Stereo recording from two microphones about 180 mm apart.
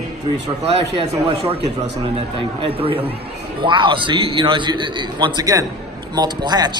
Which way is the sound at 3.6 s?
25° right (ahead or behind).